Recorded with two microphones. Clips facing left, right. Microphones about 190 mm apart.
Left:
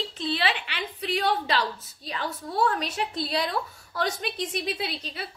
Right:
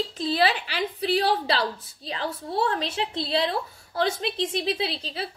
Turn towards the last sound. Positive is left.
turn(degrees=-30)  # may be behind; listen again after turning